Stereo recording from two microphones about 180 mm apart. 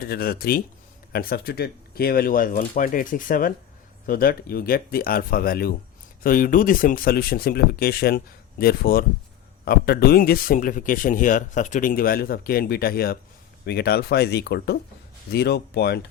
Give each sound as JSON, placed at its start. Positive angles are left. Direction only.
{"t": 0.0, "sound": "speech", "side_deg": 55}